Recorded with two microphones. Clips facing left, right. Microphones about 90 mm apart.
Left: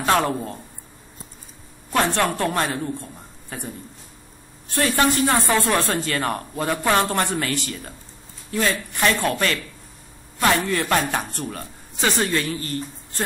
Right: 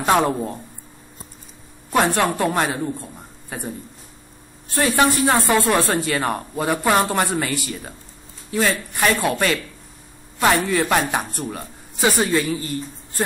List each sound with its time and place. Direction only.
0.0 s a man's voice: 15° right (ahead or behind)
1.9 s a man's voice: 15° right (ahead or behind)
4.9 s a man's voice: 20° right (ahead or behind)